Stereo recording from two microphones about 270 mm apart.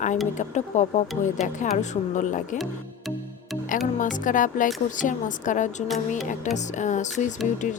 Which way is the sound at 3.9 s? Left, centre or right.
Left.